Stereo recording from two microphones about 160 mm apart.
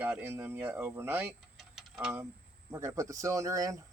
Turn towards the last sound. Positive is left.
turn(degrees=-20)  # may be behind; listen again after turning